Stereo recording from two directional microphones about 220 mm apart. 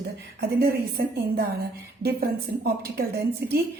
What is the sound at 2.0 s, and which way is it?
A woman's voice, 45° right (ahead or behind).